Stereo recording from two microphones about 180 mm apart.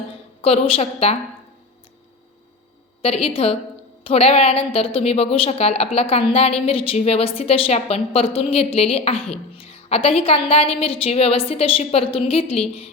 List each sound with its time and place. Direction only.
0.4 s a woman's voice: 35° left (ahead or behind)
3.0 s a woman's voice: 35° left (ahead or behind)